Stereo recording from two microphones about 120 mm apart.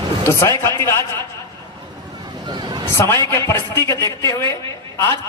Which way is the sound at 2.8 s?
20° left (ahead or behind).